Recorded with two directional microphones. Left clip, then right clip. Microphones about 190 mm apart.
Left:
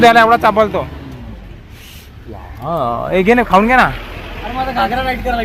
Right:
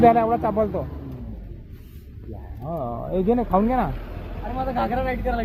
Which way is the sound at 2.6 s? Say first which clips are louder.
Left 12 dB; 30° left (ahead or behind).